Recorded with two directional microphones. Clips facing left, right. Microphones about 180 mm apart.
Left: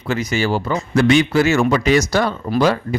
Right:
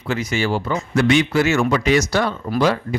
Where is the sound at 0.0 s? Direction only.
40° left (ahead or behind).